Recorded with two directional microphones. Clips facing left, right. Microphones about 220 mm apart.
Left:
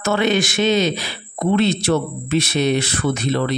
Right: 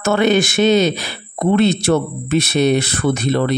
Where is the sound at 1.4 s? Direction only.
55° right (ahead or behind).